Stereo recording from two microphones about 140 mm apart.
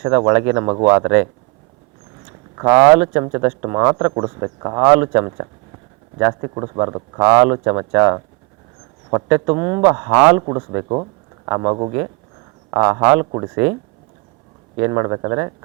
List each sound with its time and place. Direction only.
0.0 s speech: 20° right (ahead or behind)
0.9 s speech: 15° right (ahead or behind)
2.6 s speech: 10° right (ahead or behind)
4.8 s speech: 10° right (ahead or behind)
5.0 s speech: 25° right (ahead or behind)
7.2 s speech: 10° right (ahead or behind)
7.5 s speech: 25° right (ahead or behind)
10.1 s speech: 10° right (ahead or behind)
10.4 s speech: 25° right (ahead or behind)
12.8 s speech: 10° right (ahead or behind)
14.8 s speech: 25° right (ahead or behind)